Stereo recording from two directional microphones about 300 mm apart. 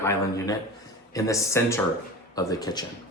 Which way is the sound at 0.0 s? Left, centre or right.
Centre.